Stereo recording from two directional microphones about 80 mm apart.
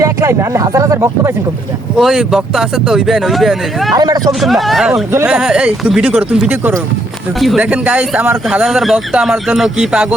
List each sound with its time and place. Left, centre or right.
0.0 s speech: right
2.0 s speech: centre
3.9 s speech: right
4.3 s speech: centre
7.3 s speech: centre
7.6 s speech: centre
8.4 s speech: centre